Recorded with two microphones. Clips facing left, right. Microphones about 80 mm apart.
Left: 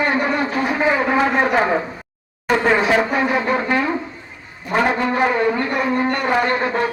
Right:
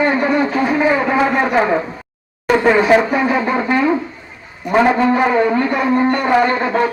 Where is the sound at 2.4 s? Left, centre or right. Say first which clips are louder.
Right 4 dB; centre.